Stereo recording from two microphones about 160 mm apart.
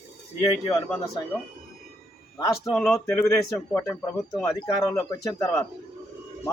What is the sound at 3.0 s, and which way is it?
A man's voice, 15° left (ahead or behind).